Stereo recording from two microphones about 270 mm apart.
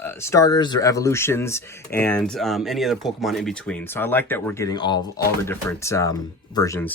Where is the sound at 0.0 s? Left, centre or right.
Centre.